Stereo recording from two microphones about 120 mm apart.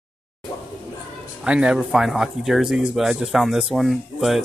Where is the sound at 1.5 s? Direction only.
10° right (ahead or behind).